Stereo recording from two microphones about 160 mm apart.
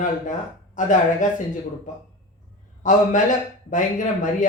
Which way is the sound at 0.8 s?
55° left (ahead or behind).